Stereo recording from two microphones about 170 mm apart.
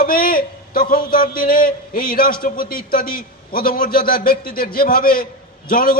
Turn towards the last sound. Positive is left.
turn(degrees=55)  # may be behind; listen again after turning